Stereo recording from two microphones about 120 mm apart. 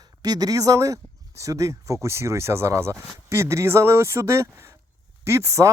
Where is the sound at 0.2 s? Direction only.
30° right (ahead or behind).